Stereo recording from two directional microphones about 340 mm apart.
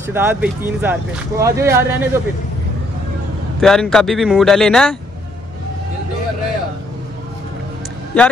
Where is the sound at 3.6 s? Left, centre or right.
Centre.